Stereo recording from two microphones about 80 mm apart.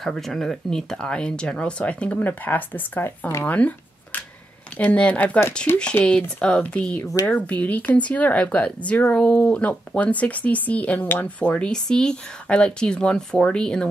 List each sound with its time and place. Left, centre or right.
0.0 s speech: centre; by 3.3 s left
3.4 s a sound: centre
4.7 s speech: centre